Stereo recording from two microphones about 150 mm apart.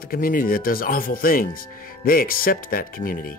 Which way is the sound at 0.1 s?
70° left (ahead or behind).